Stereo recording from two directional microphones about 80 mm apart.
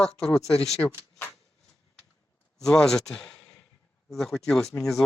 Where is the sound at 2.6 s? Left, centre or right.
Centre.